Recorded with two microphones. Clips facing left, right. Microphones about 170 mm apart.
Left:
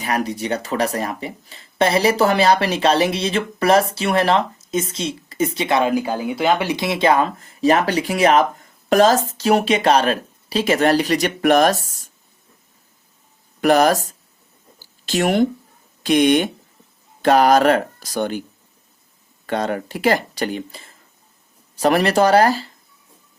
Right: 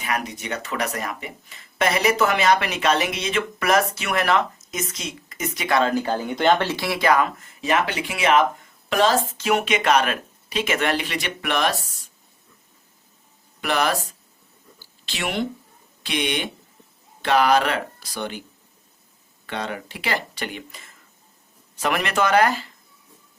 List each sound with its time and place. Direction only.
0.0 s speech: 35° left (ahead or behind)
13.6 s speech: 45° left (ahead or behind)
14.8 s a sound: 45° left (ahead or behind)
16.0 s speech: 45° left (ahead or behind)
19.5 s speech: 45° left (ahead or behind)